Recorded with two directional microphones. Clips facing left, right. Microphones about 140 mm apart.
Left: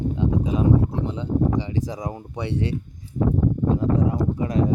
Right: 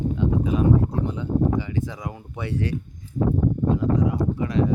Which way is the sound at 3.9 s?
30° left (ahead or behind).